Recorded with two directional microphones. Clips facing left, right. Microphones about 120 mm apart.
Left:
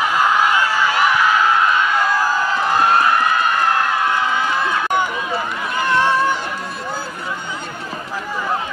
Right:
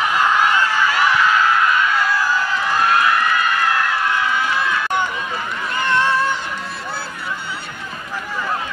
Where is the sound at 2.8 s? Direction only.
25° left (ahead or behind).